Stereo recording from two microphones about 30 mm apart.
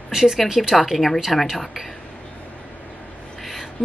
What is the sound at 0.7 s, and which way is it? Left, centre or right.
Speech, centre.